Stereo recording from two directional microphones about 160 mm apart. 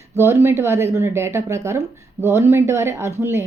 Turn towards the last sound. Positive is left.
turn(degrees=-15)  # may be behind; listen again after turning